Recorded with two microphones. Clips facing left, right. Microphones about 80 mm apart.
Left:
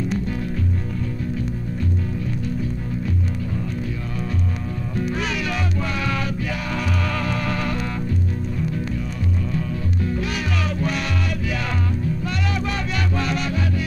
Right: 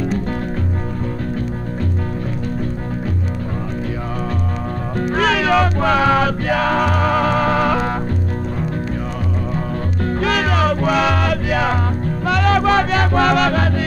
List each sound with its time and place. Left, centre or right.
4.9 s music: right
10.0 s music: right
11.0 s music: right